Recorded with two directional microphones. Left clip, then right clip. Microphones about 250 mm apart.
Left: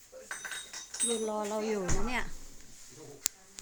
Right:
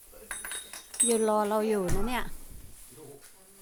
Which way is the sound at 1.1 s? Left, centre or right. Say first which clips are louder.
Right 8 dB; right.